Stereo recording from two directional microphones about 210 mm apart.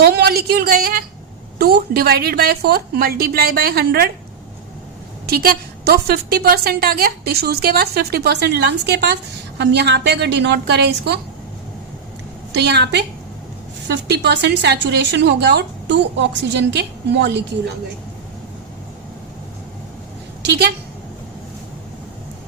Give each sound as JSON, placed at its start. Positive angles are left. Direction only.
{"t": 0.0, "sound": "a woman's voice", "side_deg": -50}
{"t": 5.3, "sound": "a woman's voice", "side_deg": -45}
{"t": 12.5, "sound": "a woman's voice", "side_deg": -55}
{"t": 20.4, "sound": "a woman's voice", "side_deg": -50}